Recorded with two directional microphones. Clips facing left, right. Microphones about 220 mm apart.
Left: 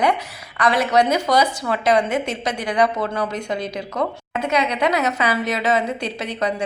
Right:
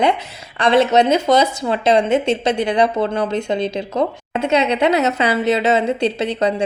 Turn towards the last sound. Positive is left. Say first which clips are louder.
# right 5 dB
turn(degrees=-30)  # may be behind; listen again after turning